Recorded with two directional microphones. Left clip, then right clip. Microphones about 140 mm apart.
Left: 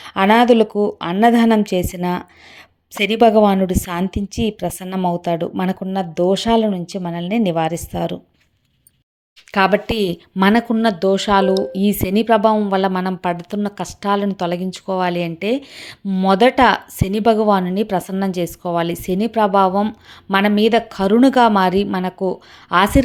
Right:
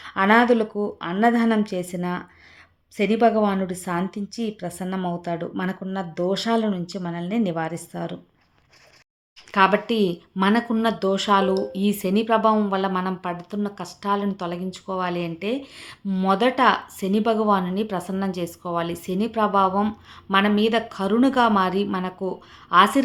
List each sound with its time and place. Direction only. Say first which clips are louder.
0.0 s speech: left 4 dB; 35° left (ahead or behind)
9.5 s speech: left 3 dB; 35° left (ahead or behind)